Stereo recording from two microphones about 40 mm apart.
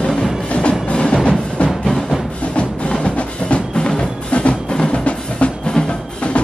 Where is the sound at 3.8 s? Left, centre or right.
Left.